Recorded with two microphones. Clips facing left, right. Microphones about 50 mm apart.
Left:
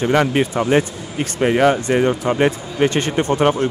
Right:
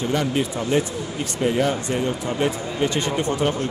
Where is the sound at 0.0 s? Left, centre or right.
Left.